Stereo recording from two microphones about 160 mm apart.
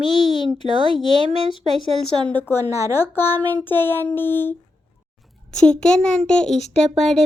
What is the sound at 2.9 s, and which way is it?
Speech, 15° left (ahead or behind).